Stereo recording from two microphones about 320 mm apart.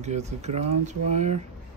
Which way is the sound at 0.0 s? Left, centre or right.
Right.